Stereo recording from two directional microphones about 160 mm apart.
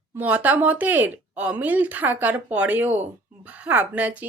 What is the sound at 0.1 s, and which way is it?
A woman's voice, 10° right (ahead or behind).